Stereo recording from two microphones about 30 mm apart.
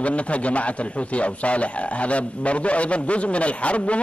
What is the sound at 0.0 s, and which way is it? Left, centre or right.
A man's voice, left.